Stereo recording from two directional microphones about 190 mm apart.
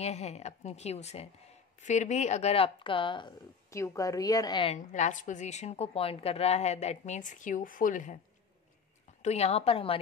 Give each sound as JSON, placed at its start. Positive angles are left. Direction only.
{"t": 0.0, "sound": "a woman's voice", "side_deg": 35}
{"t": 4.7, "sound": "a woman's voice", "side_deg": 40}
{"t": 9.2, "sound": "a woman's voice", "side_deg": 35}